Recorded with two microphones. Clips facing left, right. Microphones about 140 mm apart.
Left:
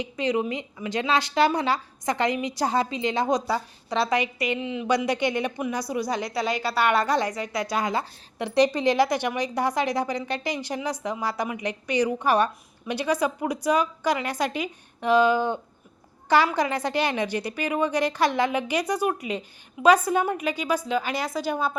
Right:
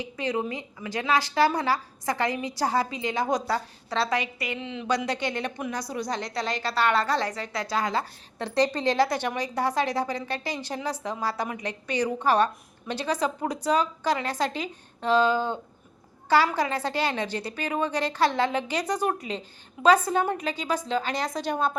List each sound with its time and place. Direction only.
0.0 s a woman's voice: 20° left (ahead or behind); by 21.8 s 5° left (ahead or behind)